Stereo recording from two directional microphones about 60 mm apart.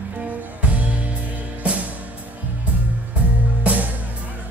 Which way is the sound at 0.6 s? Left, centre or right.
Right.